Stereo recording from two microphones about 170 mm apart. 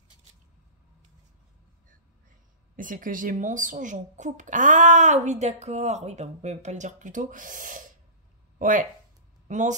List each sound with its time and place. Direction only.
2.7 s speech: 50° right (ahead or behind)